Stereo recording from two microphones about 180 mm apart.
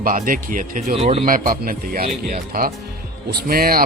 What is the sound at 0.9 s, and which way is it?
Speech, 30° right (ahead or behind).